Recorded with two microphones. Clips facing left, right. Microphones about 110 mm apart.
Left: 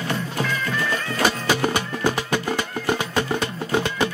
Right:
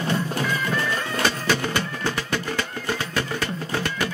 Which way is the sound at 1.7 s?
15° left (ahead or behind).